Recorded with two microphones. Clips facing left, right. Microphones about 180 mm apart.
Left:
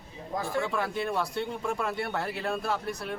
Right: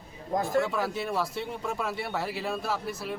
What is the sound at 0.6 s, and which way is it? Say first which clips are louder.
A man's voice: right 1 dB; 5° right (ahead or behind).